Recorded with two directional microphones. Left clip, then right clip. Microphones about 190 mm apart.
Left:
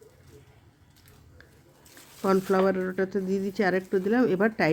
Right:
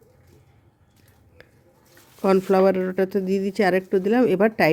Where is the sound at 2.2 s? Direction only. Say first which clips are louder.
Right 6 dB; 35° right (ahead or behind).